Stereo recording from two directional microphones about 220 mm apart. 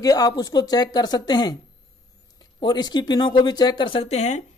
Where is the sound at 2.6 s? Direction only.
20° left (ahead or behind).